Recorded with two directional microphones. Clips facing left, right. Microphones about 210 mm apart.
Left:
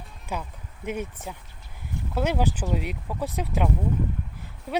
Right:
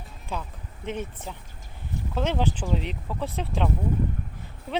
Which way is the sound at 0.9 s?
10° left (ahead or behind).